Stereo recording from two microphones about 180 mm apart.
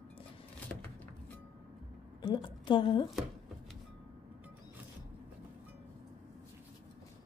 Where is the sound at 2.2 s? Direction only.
30° left (ahead or behind).